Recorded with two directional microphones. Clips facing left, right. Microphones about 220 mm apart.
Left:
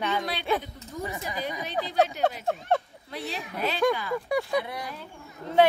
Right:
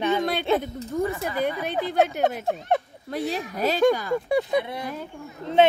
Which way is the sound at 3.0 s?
45° right (ahead or behind).